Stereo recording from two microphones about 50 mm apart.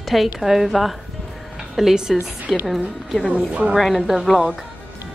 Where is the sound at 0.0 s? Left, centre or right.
Centre.